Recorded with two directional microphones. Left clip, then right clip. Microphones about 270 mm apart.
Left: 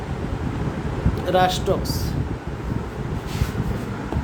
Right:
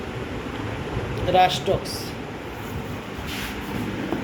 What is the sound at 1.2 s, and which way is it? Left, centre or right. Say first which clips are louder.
Speech: right 1 dB; centre.